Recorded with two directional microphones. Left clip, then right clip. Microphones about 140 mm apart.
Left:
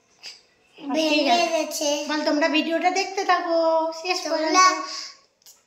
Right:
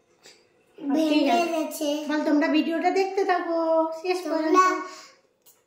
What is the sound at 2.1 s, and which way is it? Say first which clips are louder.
A woman's voice: even; centre (ahead or behind).